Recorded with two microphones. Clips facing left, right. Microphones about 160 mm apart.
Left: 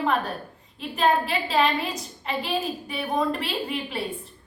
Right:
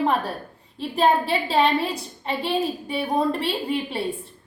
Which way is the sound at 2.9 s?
30° right (ahead or behind).